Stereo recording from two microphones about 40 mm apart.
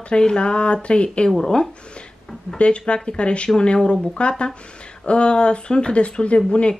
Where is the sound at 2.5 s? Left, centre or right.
Left.